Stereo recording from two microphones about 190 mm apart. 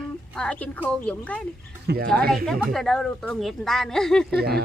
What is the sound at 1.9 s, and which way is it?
Speech, 60° right (ahead or behind).